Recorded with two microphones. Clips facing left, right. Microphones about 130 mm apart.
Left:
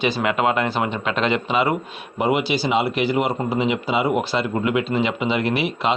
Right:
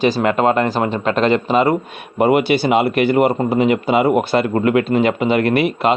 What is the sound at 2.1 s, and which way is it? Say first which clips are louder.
A man's voice: right 6 dB; 55° right (ahead or behind).